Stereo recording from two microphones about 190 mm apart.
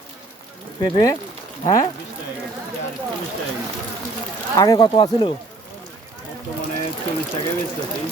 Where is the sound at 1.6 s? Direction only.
20° left (ahead or behind).